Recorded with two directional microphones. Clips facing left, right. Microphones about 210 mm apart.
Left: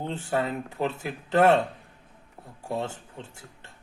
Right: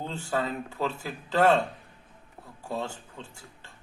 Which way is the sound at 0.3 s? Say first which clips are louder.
Left 2 dB; 20° left (ahead or behind).